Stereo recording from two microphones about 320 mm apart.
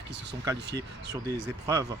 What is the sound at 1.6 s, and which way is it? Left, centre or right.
Speech, centre.